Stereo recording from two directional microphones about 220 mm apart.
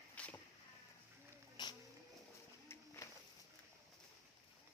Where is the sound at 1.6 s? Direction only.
20° left (ahead or behind).